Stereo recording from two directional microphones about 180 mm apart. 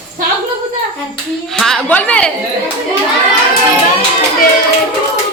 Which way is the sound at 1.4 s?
Centre (ahead or behind).